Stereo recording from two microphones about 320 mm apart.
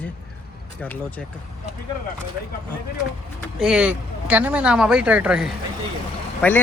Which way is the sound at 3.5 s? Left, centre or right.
Centre.